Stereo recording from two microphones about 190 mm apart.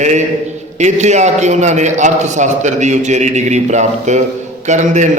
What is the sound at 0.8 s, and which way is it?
A man's voice, 40° right (ahead or behind).